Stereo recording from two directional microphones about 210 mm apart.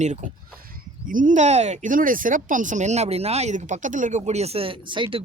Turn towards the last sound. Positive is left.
turn(degrees=-25)  # may be behind; listen again after turning